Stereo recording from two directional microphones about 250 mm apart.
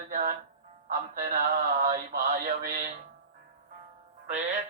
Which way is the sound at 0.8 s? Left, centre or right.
Right.